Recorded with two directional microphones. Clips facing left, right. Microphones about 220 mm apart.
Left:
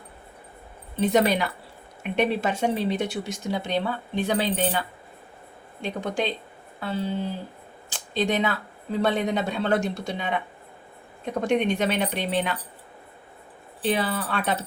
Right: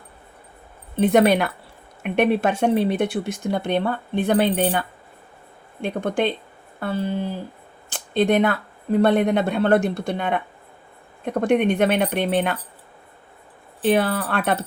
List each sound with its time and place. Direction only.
0.9 s speech: 55° right (ahead or behind)
5.8 s speech: 55° right (ahead or behind)
7.9 s speech: 55° right (ahead or behind)
13.8 s speech: 60° right (ahead or behind)